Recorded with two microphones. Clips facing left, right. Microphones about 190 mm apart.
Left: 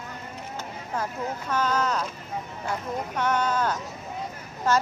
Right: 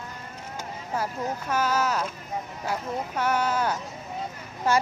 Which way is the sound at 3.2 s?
5° right (ahead or behind).